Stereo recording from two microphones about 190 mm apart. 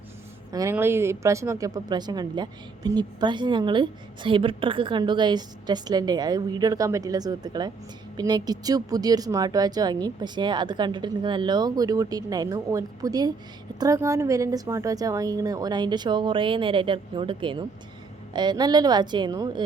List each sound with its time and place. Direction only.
0.5 s a woman's voice: 15° right (ahead or behind)